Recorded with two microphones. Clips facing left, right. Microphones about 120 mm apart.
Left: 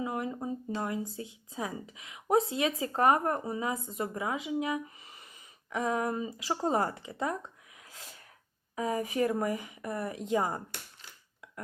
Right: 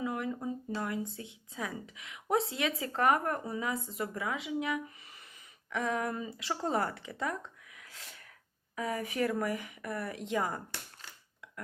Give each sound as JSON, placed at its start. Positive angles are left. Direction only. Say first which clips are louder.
{"t": 0.0, "sound": "speech", "louder": "left 1 dB", "side_deg": 25}
{"t": 7.8, "sound": "sneeze", "louder": "left 2 dB", "side_deg": 20}
{"t": 8.7, "sound": "speech", "louder": "left 4 dB", "side_deg": 25}